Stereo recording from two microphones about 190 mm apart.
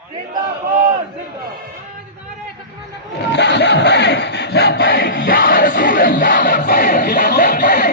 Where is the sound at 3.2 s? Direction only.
65° left (ahead or behind).